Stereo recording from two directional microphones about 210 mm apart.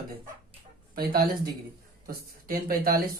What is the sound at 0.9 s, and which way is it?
A man's voice, 45° right (ahead or behind).